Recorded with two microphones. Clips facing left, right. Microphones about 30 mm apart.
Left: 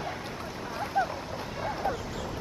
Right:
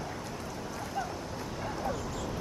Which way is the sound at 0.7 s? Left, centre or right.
Left.